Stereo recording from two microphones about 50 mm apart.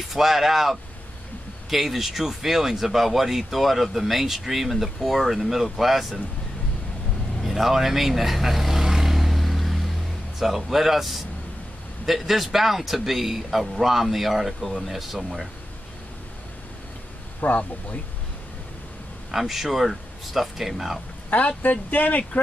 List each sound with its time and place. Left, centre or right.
0.1 s speech: centre
7.4 s vehicle: centre
10.4 s speech: centre
17.4 s speech: left
19.3 s speech: centre
21.3 s speech: left